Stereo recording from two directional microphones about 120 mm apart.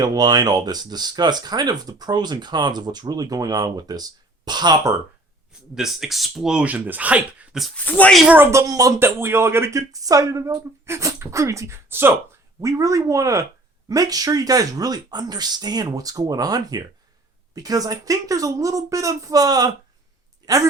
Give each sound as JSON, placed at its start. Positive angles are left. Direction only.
{"t": 0.0, "sound": "speech", "side_deg": -35}
{"t": 5.7, "sound": "speech", "side_deg": -5}
{"t": 7.9, "sound": "speech", "side_deg": 10}
{"t": 8.3, "sound": "speech", "side_deg": -20}